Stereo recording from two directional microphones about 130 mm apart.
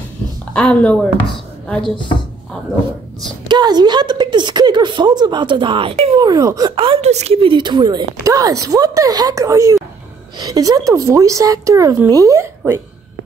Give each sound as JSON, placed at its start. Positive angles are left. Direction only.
{"t": 0.5, "sound": "speech", "side_deg": 10}
{"t": 2.0, "sound": "speech", "side_deg": 40}
{"t": 3.4, "sound": "a woman's voice", "side_deg": -35}
{"t": 6.1, "sound": "a woman's voice", "side_deg": -30}
{"t": 6.7, "sound": "a woman's voice", "side_deg": -40}
{"t": 7.0, "sound": "a woman's voice", "side_deg": -55}